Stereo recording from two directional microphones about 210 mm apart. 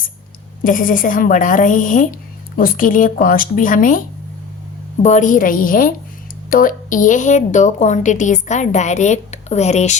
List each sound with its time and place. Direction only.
0.6 s a woman's voice: 40° left (ahead or behind)
5.0 s a woman's voice: 35° left (ahead or behind)